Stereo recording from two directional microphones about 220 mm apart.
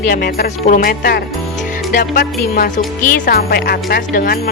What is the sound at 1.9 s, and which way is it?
Music, 40° left (ahead or behind).